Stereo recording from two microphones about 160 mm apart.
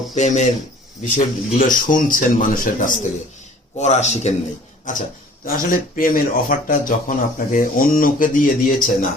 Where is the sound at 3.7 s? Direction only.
45° left (ahead or behind).